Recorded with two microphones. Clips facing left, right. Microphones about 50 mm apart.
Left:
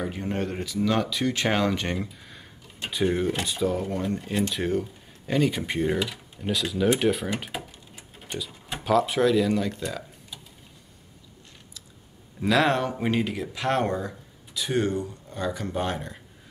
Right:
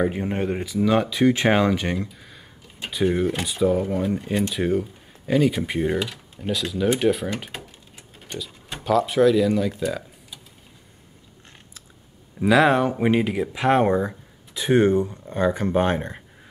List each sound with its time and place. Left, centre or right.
0.0 s speech: right
1.8 s speech: centre
12.4 s speech: centre; by 16.2 s right